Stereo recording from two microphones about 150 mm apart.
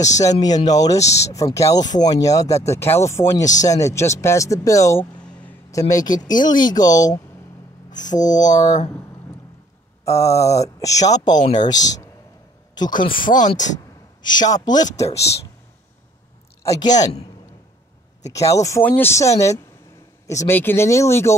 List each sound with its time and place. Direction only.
0.2 s speech: 25° left (ahead or behind)
8.5 s speech: 55° left (ahead or behind)
10.0 s speech: 20° left (ahead or behind)
13.1 s speech: 65° left (ahead or behind)
14.2 s speech: 30° left (ahead or behind)
16.6 s speech: 25° left (ahead or behind)
18.2 s speech: 20° left (ahead or behind)